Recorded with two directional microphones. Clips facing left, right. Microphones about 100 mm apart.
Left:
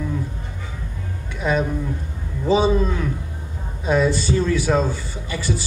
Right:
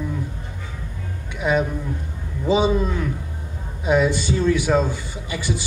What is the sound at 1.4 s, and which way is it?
A man's voice, 15° right (ahead or behind).